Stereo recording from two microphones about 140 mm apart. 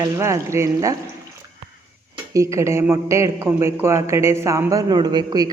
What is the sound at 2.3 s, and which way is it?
A man's voice, 20° right (ahead or behind).